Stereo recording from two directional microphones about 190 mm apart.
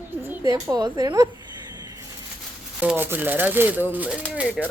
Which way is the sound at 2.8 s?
10° right (ahead or behind).